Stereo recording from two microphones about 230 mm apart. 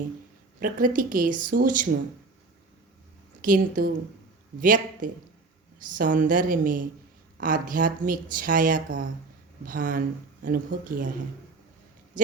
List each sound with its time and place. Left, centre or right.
0.6 s speech: right
3.4 s speech: right
12.1 s a sound: right